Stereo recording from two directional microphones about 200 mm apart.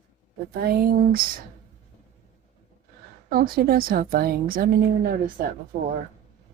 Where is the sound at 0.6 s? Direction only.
45° right (ahead or behind).